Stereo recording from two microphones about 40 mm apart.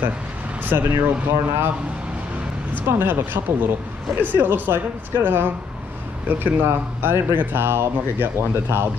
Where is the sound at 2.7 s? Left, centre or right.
Right.